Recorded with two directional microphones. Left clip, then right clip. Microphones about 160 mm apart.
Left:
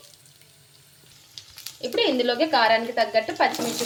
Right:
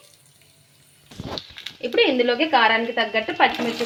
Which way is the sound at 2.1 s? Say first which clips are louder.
Right 3 dB; 25° right (ahead or behind).